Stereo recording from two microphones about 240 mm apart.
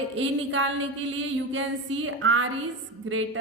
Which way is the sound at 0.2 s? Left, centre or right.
Right.